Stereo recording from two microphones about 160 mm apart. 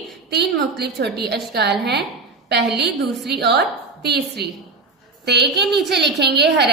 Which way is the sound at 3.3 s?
90° right.